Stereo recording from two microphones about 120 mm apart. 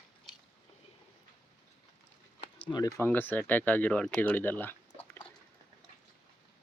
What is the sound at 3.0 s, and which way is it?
Speech, 15° left (ahead or behind).